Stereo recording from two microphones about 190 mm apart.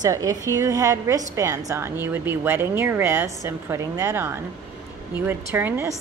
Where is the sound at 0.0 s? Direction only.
15° right (ahead or behind).